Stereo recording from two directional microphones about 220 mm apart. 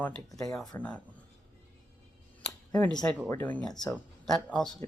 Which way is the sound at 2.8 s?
5° left (ahead or behind).